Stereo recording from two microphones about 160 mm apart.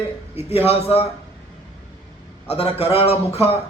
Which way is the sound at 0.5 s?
40° left (ahead or behind).